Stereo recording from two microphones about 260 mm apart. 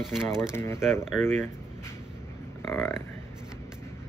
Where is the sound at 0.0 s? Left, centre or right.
Centre.